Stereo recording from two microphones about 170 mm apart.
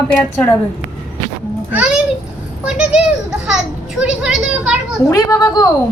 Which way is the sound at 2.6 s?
5° right (ahead or behind).